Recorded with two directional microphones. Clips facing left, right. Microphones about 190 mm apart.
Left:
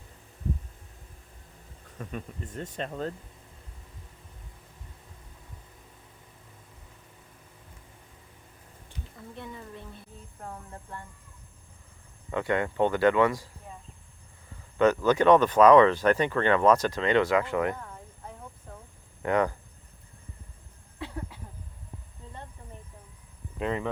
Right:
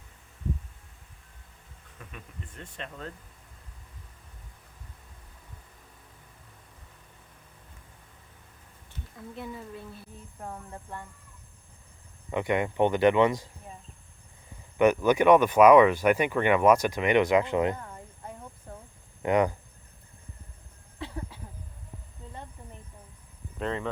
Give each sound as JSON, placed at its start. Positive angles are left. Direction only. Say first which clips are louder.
{"t": 2.0, "sound": "speech", "louder": "left 8 dB", "side_deg": 40}
{"t": 9.1, "sound": "speech", "louder": "right 3 dB", "side_deg": -5}
{"t": 12.3, "sound": "speech", "louder": "right 1 dB", "side_deg": -15}
{"t": 14.8, "sound": "speech", "louder": "right 1 dB", "side_deg": -15}
{"t": 19.2, "sound": "speech", "louder": "right 2 dB", "side_deg": -15}
{"t": 23.6, "sound": "speech", "louder": "left 1 dB", "side_deg": 10}